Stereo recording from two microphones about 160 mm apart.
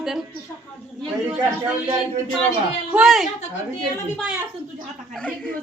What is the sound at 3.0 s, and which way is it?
Speech, centre (ahead or behind).